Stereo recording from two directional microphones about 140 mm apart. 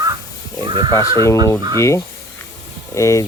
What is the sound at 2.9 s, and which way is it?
Speech, 20° left (ahead or behind).